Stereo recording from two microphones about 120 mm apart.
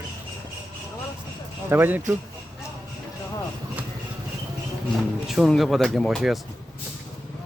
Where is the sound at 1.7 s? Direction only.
15° right (ahead or behind).